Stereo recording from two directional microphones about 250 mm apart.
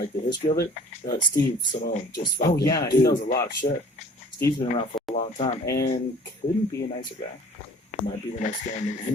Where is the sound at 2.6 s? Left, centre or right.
Centre.